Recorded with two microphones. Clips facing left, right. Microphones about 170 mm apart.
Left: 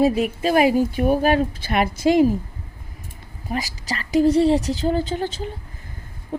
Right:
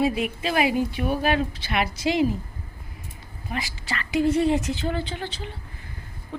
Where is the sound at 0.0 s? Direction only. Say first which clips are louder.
Left 5 dB; 40° left (ahead or behind).